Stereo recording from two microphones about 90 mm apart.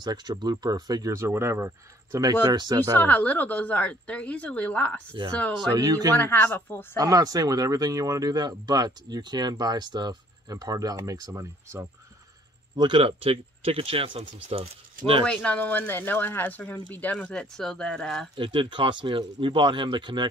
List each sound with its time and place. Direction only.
0.0 s speech: 50° right (ahead or behind); by 1.7 s 30° right (ahead or behind)
2.4 s speech: 50° right (ahead or behind)
3.0 s speech: 20° left (ahead or behind)
5.2 s speech: 60° right (ahead or behind)
5.8 s speech: 45° right (ahead or behind)
6.1 s speech: 25° left (ahead or behind)
7.0 s speech: 45° right (ahead or behind)
12.7 s speech: 65° right (ahead or behind); by 14.6 s 90° right
15.2 s speech: 15° left (ahead or behind)
18.3 s speech: 70° right (ahead or behind)